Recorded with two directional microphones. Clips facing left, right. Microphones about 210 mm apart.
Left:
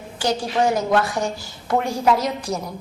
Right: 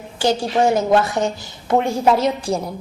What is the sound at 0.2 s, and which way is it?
A woman's voice, 25° right (ahead or behind).